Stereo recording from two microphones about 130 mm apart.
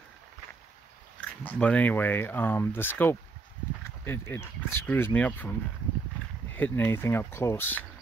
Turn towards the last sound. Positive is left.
turn(degrees=15)  # may be behind; listen again after turning